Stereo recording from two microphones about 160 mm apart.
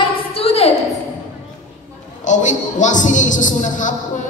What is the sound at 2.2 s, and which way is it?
A woman's voice, 50° left (ahead or behind).